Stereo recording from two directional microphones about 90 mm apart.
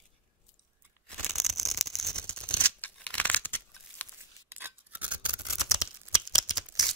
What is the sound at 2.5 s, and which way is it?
Scissors, 15° left (ahead or behind).